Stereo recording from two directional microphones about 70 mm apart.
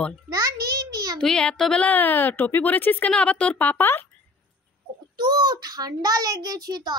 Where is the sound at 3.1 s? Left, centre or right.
Centre.